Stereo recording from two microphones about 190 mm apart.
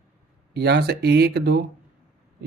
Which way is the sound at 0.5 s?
60° right (ahead or behind).